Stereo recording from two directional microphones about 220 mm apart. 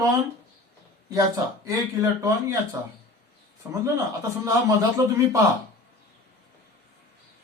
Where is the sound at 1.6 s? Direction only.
15° right (ahead or behind).